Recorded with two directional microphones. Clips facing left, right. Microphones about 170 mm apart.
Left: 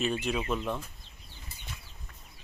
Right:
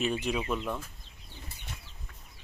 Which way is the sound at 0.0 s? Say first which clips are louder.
Even; 15° right (ahead or behind).